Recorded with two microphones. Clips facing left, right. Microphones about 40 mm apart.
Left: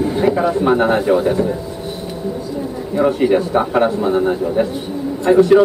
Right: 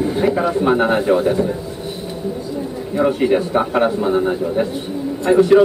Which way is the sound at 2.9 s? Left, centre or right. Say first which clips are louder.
Left 1 dB; centre.